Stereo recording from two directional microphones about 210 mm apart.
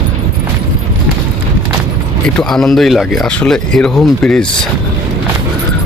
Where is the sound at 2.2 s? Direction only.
5° left (ahead or behind).